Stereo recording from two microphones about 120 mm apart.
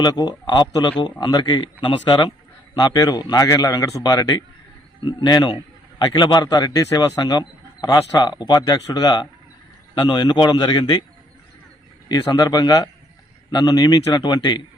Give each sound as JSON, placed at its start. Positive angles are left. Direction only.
{"t": 0.0, "sound": "speech", "side_deg": 35}
{"t": 12.0, "sound": "speech", "side_deg": 35}